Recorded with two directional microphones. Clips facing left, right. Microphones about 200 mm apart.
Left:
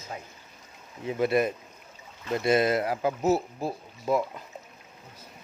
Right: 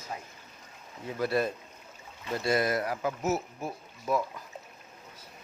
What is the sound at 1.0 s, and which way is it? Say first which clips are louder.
Speech: left 4 dB; 20° left (ahead or behind).